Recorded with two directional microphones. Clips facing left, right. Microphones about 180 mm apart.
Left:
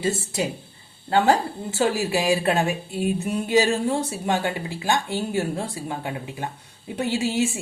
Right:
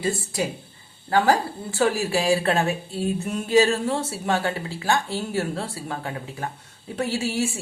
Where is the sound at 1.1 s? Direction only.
25° left (ahead or behind).